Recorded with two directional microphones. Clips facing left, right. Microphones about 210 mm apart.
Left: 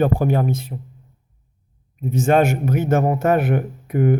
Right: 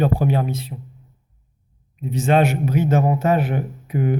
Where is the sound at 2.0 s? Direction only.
45° left (ahead or behind).